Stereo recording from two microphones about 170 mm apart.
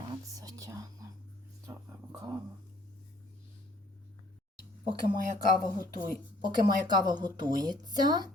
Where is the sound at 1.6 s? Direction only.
20° right (ahead or behind).